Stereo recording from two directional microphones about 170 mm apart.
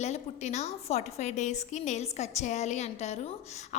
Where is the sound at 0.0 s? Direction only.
40° left (ahead or behind).